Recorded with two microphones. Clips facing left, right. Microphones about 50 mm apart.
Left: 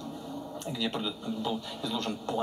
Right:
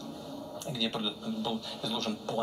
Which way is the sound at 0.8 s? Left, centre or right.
Centre.